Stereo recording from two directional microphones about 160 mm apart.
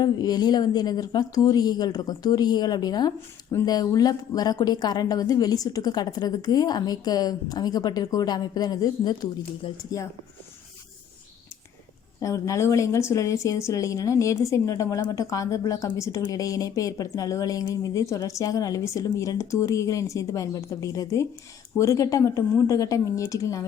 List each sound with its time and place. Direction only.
0.0 s speech: 25° left (ahead or behind)
12.2 s speech: 20° left (ahead or behind)